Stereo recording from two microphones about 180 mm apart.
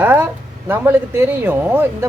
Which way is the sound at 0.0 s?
10° right (ahead or behind).